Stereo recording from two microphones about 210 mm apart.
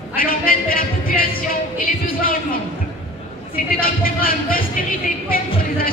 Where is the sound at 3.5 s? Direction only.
45° left (ahead or behind).